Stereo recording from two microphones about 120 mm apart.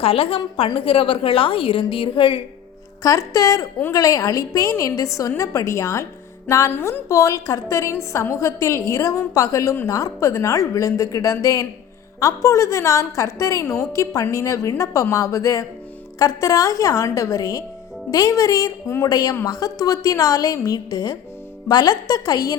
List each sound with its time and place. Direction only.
0.0 s a woman's voice: 50° left (ahead or behind)
3.0 s a woman's voice: 30° left (ahead or behind)